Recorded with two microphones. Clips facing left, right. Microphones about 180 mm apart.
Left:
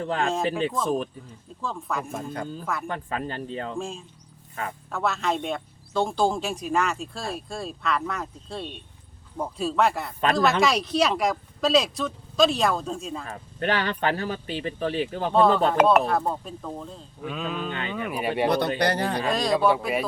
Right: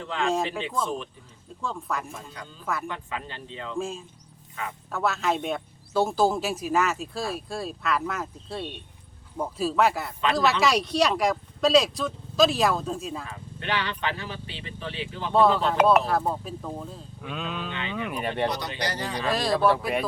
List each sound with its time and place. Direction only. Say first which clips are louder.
0.0 s speech: left 3 dB; 45° left (ahead or behind)
1.6 s speech: left 1 dB; centre (ahead or behind)
2.1 s speech: left 10 dB; 50° left (ahead or behind)
3.8 s speech: right 1 dB; centre (ahead or behind)
13.2 s speech: left 6 dB; 45° left (ahead or behind)
15.3 s speech: left 1 dB; 5° right (ahead or behind)
17.7 s speech: left 2 dB; 45° left (ahead or behind)
17.9 s speech: left 2 dB; 5° left (ahead or behind)
18.4 s speech: left 6 dB; 55° left (ahead or behind)
19.3 s speech: even; 5° right (ahead or behind)